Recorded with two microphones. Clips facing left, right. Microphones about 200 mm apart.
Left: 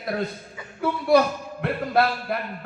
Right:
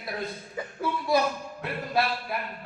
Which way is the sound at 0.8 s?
65° left (ahead or behind).